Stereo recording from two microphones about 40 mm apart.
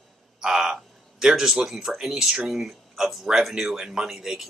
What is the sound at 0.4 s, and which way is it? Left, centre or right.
Speech, centre.